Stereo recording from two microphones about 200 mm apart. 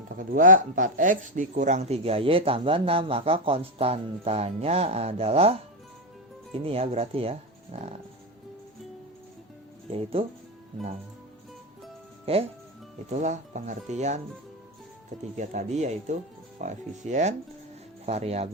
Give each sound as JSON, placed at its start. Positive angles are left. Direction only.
{"t": 0.2, "sound": "speech", "side_deg": -45}
{"t": 9.9, "sound": "speech", "side_deg": -30}
{"t": 12.2, "sound": "speech", "side_deg": -30}
{"t": 15.4, "sound": "speech", "side_deg": -35}